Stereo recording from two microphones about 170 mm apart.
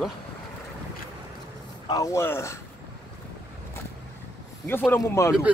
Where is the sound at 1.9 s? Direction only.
20° left (ahead or behind).